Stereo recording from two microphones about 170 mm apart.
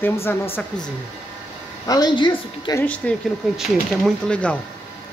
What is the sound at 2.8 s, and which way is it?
A man's voice, 10° left (ahead or behind).